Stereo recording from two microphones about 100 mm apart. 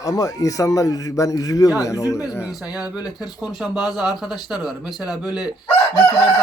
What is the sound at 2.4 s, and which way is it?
Speech, 10° right (ahead or behind).